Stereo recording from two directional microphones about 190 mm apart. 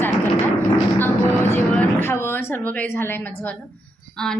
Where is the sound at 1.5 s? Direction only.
10° left (ahead or behind).